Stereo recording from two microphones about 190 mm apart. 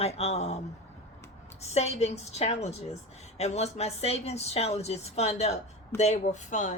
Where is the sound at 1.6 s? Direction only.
35° left (ahead or behind).